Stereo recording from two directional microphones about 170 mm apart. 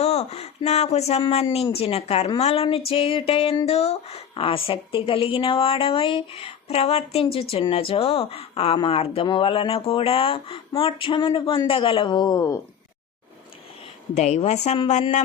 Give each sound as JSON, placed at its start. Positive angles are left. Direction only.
{"t": 0.0, "sound": "a woman's voice", "side_deg": 40}
{"t": 14.2, "sound": "speech", "side_deg": 40}